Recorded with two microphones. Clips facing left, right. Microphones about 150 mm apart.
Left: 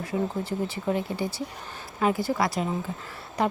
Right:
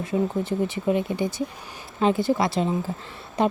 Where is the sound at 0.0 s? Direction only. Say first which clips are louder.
Right 4 dB; 20° right (ahead or behind).